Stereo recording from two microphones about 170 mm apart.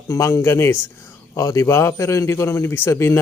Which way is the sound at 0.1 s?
15° left (ahead or behind).